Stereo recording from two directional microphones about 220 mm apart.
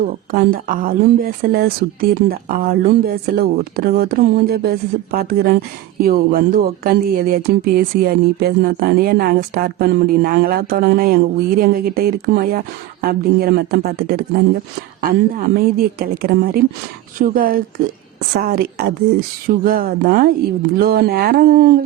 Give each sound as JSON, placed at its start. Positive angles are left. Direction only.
{"t": 0.0, "sound": "speech", "side_deg": -40}